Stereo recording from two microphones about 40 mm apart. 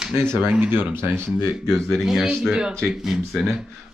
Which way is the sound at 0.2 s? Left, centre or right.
Right.